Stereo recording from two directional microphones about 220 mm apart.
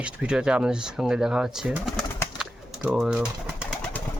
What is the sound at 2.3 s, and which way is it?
Bird, centre (ahead or behind).